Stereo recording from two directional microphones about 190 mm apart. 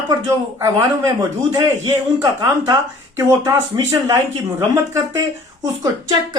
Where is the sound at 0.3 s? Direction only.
15° right (ahead or behind).